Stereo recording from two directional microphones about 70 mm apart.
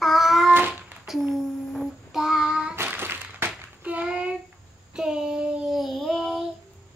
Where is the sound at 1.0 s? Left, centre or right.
Centre.